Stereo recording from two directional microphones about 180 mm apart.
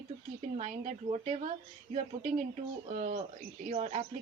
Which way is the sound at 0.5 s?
45° right (ahead or behind).